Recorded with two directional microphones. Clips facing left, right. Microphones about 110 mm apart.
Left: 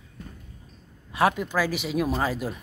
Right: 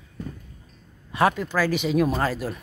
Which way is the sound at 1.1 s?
10° left (ahead or behind).